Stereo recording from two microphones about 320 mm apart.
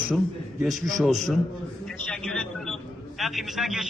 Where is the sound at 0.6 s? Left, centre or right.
Centre.